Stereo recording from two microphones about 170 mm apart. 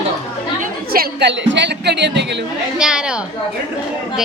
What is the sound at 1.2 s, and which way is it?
Speech, 90° right.